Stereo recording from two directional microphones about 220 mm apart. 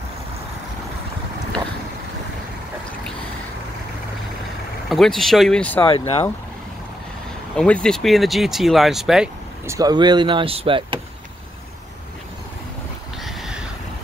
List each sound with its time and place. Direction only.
4.8 s speech: centre (ahead or behind)
5.9 s speech: 25° left (ahead or behind)
7.5 s speech: 5° left (ahead or behind)
9.8 s speech: 20° right (ahead or behind)
13.2 s a sound: centre (ahead or behind)